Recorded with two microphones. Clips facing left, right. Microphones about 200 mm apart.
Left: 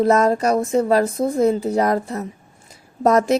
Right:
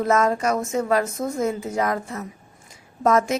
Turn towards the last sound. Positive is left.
turn(degrees=35)  # may be behind; listen again after turning